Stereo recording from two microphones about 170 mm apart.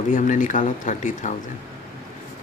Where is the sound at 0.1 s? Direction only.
50° left (ahead or behind).